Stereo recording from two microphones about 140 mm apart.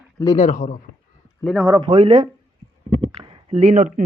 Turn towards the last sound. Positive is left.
turn(degrees=-45)  # may be behind; listen again after turning